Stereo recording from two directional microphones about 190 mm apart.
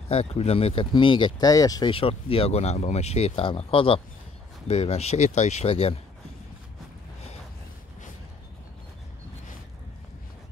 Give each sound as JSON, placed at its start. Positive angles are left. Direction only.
{"t": 0.1, "sound": "speech", "side_deg": 35}